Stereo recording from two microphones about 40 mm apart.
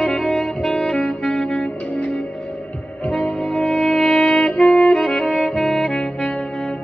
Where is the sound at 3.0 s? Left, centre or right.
Left.